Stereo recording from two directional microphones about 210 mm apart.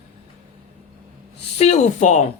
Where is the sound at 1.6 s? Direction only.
35° left (ahead or behind).